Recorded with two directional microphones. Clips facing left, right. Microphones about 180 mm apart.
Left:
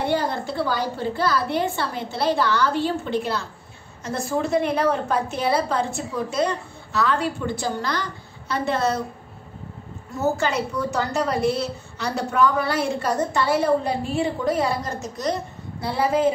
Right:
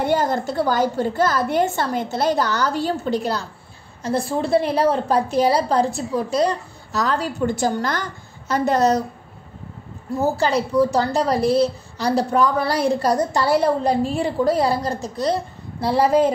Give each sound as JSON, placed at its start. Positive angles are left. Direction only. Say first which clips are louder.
{"t": 0.0, "sound": "a woman's voice", "louder": "right 4 dB", "side_deg": -45}
{"t": 10.3, "sound": "a woman's voice", "louder": "right 5 dB", "side_deg": -35}